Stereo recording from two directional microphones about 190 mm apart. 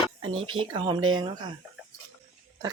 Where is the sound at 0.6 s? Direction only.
25° right (ahead or behind).